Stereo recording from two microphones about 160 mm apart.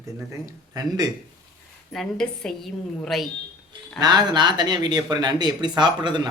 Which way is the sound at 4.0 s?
25° right (ahead or behind).